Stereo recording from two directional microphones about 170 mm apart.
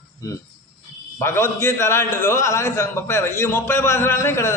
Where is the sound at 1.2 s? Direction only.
15° left (ahead or behind).